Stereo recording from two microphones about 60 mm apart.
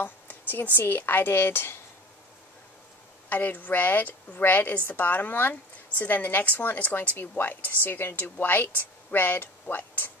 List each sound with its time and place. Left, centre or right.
0.0 s a woman's voice: left
3.3 s a woman's voice: left